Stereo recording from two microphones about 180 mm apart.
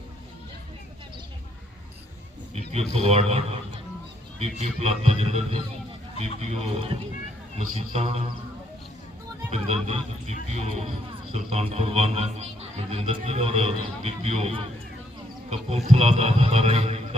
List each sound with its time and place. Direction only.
2.5 s a sound: 35° right (ahead or behind)
2.9 s speech: 35° right (ahead or behind)
9.5 s speech: 35° right (ahead or behind)